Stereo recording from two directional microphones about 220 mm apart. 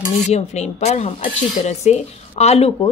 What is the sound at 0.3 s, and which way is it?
Speech, 30° left (ahead or behind).